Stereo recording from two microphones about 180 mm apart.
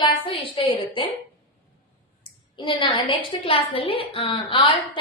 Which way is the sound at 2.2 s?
25° left (ahead or behind).